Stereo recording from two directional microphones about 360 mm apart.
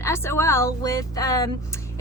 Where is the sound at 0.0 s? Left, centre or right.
Centre.